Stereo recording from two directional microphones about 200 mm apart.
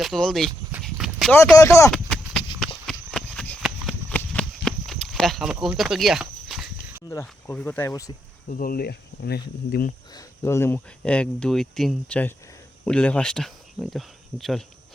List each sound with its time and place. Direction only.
0.0 s speech: centre (ahead or behind)
0.9 s clip-clop: centre (ahead or behind)
1.4 s speech: 15° left (ahead or behind)
1.9 s clip-clop: 5° left (ahead or behind)
3.1 s horse: 5° left (ahead or behind)
4.2 s a sound: 5° left (ahead or behind)
7.1 s speech: 10° left (ahead or behind)
8.4 s speech: 45° left (ahead or behind)
10.2 s speech: 15° left (ahead or behind)